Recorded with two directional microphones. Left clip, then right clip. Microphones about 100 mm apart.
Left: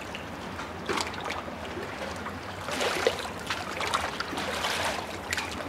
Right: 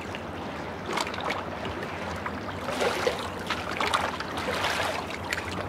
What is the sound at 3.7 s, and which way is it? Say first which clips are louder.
Boat: right 3 dB; 15° right (ahead or behind).